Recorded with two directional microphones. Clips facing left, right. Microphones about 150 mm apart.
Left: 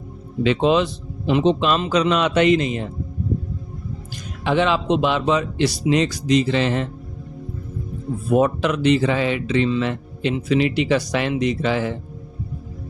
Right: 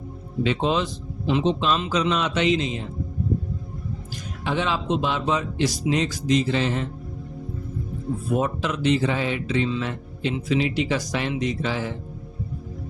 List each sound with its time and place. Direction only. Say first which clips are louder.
0.4 s speech: left 6 dB; 85° left
1.3 s speech: left 4 dB; 65° left (ahead or behind)
4.4 s speech: left 6 dB; 80° left
8.3 s speech: left 7 dB; 70° left (ahead or behind)